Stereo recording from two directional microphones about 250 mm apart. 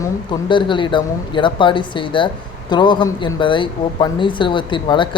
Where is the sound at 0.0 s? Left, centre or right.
Centre.